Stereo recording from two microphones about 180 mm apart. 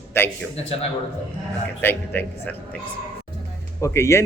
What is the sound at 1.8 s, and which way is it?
A man's voice, 10° left (ahead or behind).